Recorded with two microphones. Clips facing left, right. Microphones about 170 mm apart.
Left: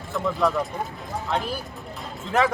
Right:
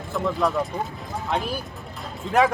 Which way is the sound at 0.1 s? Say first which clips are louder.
Even; centre (ahead or behind).